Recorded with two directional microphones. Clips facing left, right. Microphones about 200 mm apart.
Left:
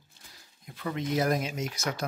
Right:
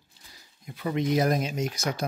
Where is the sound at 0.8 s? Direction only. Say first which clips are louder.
Right 4 dB; 15° right (ahead or behind).